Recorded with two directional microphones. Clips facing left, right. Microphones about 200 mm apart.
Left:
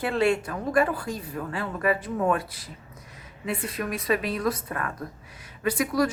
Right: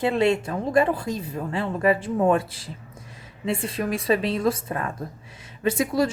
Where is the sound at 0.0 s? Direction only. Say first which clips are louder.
Right 3 dB; 25° right (ahead or behind).